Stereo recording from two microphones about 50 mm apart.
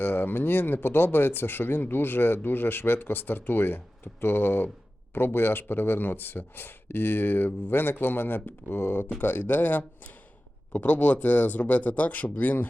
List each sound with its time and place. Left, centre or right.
0.0 s speech: left